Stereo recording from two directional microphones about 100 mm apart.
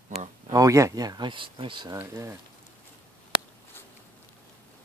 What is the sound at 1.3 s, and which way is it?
Speech, 60° right (ahead or behind).